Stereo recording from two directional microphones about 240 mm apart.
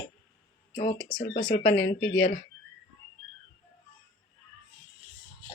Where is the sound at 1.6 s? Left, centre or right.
Left.